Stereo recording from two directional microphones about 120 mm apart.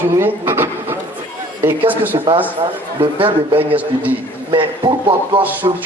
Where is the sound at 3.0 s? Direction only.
45° right (ahead or behind).